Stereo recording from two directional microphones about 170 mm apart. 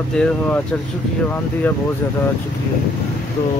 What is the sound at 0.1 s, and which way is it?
Speech, 5° left (ahead or behind).